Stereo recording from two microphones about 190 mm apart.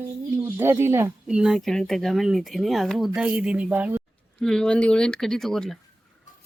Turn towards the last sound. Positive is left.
turn(degrees=0)  # may be behind; listen again after turning